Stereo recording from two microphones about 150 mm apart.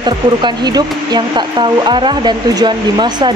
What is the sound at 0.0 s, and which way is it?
Speech, 30° right (ahead or behind).